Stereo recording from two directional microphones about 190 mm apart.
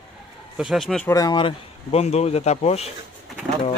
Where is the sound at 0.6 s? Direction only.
Centre (ahead or behind).